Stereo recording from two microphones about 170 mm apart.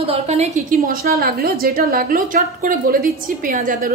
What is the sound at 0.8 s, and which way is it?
A woman's voice, 60° right (ahead or behind).